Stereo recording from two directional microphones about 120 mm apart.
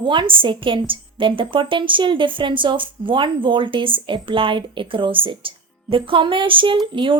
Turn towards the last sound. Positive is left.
turn(degrees=-45)  # may be behind; listen again after turning